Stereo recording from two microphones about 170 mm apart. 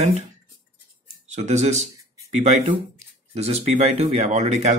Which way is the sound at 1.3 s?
40° right (ahead or behind).